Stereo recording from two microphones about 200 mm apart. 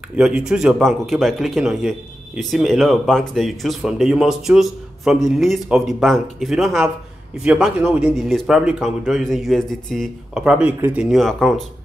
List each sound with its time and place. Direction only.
0.1 s speech: 5° right (ahead or behind)